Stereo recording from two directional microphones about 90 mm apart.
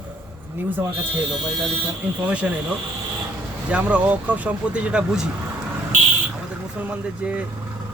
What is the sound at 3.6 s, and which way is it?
Speech, 15° right (ahead or behind).